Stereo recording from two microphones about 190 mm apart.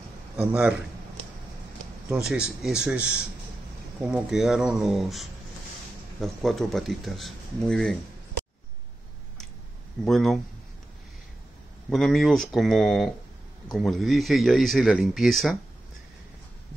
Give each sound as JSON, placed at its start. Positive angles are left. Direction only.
{"t": 0.4, "sound": "a man's voice", "side_deg": -5}
{"t": 2.2, "sound": "speech", "side_deg": -5}
{"t": 10.0, "sound": "speech", "side_deg": 0}
{"t": 11.9, "sound": "speech", "side_deg": 0}